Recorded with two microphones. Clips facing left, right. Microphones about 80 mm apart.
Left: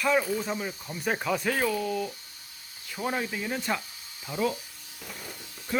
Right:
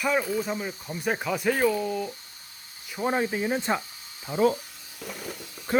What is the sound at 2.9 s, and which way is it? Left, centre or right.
Speech, right.